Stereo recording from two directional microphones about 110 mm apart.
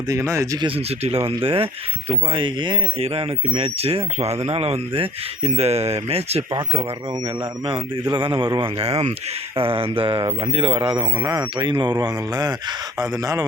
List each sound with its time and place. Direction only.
0.1 s speech: 25° right (ahead or behind)
0.6 s speech: 60° right (ahead or behind)
3.0 s speech: 65° right (ahead or behind)
7.6 s speech: 55° right (ahead or behind); by 13.4 s 35° right (ahead or behind)